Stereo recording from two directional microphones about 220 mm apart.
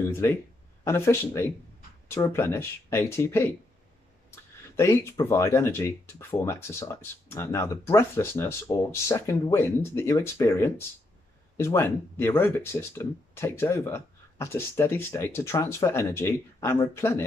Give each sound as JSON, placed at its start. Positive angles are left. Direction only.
{"t": 0.2, "sound": "speech", "side_deg": 10}
{"t": 4.7, "sound": "speech", "side_deg": 10}